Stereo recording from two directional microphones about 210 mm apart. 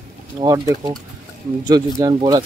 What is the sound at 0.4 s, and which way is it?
Speech, 15° right (ahead or behind).